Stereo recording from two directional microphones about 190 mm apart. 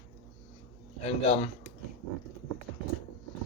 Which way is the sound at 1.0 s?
30° left (ahead or behind).